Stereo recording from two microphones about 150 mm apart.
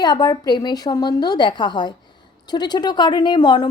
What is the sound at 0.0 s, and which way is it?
A woman's voice, 25° left (ahead or behind).